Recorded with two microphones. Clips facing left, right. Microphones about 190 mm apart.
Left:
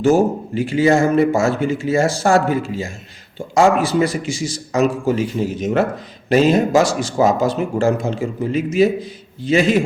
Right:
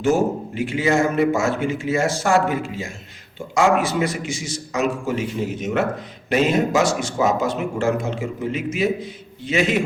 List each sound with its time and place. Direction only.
0.0 s a man's voice: 30° left (ahead or behind)